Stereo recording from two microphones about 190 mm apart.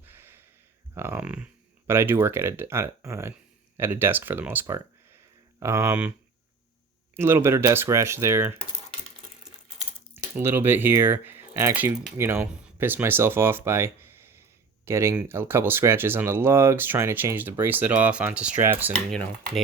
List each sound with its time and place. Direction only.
0.0 s a sound: 10° right (ahead or behind)
0.9 s speech: 10° right (ahead or behind)
7.2 s speech: 15° right (ahead or behind)
10.3 s speech: 10° right (ahead or behind)